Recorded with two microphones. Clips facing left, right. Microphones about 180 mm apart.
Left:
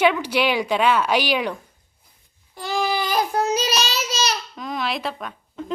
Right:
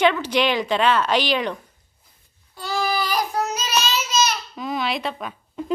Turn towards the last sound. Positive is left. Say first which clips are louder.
# right 3 dB
turn(degrees=-5)  # may be behind; listen again after turning